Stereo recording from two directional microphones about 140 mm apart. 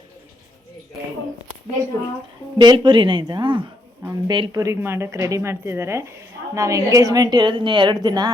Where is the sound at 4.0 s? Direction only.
15° right (ahead or behind).